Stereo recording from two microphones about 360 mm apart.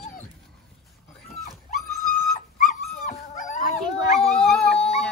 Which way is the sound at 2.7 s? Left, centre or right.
Left.